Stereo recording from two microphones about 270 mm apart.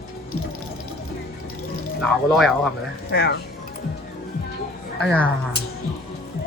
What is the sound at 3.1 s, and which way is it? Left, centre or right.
Speech, left.